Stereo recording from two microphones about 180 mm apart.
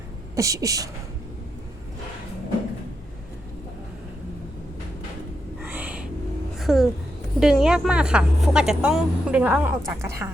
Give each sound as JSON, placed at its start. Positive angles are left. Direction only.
{"t": 0.3, "sound": "speech", "side_deg": -20}
{"t": 5.7, "sound": "music", "side_deg": -5}
{"t": 7.3, "sound": "speech", "side_deg": -5}